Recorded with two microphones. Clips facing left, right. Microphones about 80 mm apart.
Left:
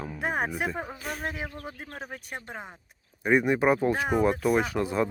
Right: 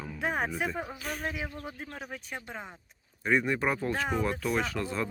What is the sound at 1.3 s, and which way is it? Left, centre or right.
Speech, left.